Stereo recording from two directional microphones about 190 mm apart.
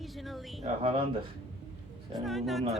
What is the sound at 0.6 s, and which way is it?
Speech, 30° right (ahead or behind).